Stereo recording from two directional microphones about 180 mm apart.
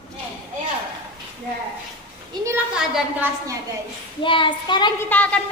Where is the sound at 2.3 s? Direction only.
25° right (ahead or behind).